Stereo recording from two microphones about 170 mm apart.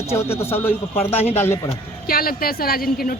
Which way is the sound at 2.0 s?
60° left (ahead or behind).